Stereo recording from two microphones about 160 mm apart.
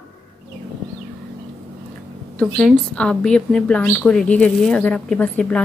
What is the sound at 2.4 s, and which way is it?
Speech, centre (ahead or behind).